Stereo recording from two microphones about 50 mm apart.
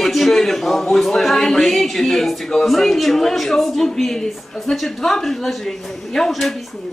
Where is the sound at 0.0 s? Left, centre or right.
Centre.